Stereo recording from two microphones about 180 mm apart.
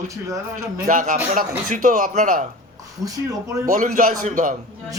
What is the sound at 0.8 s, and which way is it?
Speech, 45° right (ahead or behind).